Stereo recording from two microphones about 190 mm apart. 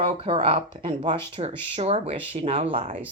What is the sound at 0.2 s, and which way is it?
Speech, 30° right (ahead or behind).